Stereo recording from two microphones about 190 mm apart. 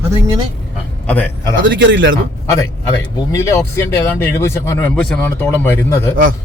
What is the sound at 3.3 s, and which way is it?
Speech, 15° left (ahead or behind).